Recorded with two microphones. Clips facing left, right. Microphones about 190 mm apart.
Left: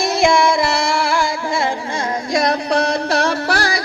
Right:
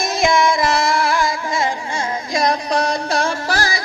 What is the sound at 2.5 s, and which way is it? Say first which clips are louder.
Music: left 2 dB; 65° left (ahead or behind).